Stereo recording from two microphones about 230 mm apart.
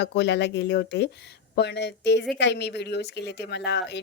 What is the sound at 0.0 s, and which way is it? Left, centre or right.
A woman's voice, left.